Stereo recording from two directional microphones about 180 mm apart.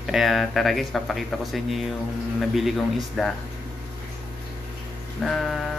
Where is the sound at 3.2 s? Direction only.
Centre (ahead or behind).